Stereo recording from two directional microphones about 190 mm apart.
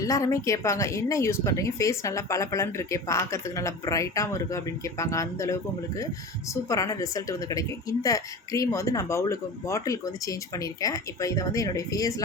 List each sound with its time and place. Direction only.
0.0 s a woman's voice: 15° left (ahead or behind)